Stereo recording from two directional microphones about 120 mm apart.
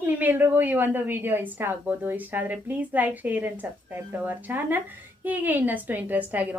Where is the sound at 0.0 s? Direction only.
15° right (ahead or behind).